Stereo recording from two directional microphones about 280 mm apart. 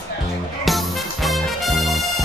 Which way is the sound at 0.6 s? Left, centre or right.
Centre.